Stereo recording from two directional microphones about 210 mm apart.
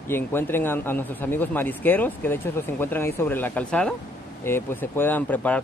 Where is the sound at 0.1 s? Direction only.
10° left (ahead or behind).